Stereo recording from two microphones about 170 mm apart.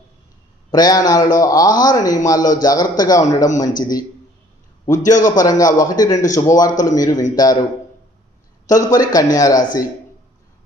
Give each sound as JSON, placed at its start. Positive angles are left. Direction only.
{"t": 0.7, "sound": "a man's voice", "side_deg": 20}
{"t": 8.6, "sound": "a man's voice", "side_deg": 20}